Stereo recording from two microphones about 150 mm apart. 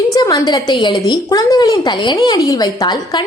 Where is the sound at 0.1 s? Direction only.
25° left (ahead or behind).